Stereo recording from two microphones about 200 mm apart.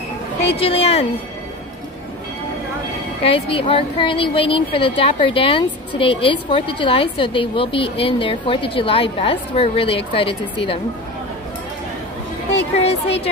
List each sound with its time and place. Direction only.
0.6 s a woman's voice: 30° left (ahead or behind)
3.3 s a woman's voice: 25° left (ahead or behind)
12.7 s a woman's voice: 30° left (ahead or behind)